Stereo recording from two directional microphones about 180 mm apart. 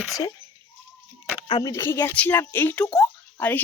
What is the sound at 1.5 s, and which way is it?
Speech, 20° left (ahead or behind).